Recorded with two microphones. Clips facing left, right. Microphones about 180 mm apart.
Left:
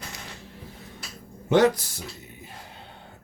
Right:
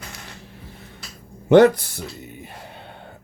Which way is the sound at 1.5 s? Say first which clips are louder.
Right 7 dB; 60° right (ahead or behind).